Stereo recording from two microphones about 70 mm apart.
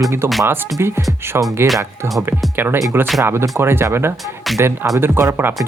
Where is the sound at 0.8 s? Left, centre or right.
Right.